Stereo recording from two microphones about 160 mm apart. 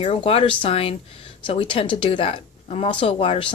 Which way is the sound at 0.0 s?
40° left (ahead or behind).